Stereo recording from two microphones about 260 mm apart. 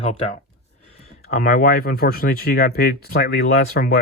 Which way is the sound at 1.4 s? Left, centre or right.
Left.